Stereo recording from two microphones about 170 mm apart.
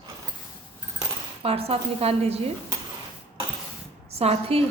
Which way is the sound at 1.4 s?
35° right (ahead or behind).